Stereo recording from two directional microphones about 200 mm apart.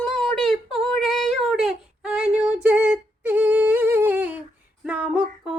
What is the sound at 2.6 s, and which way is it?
Humming, 5° right (ahead or behind).